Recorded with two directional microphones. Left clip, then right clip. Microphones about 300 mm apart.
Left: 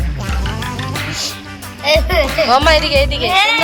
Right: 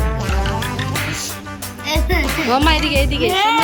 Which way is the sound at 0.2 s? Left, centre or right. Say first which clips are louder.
Left 2 dB; centre.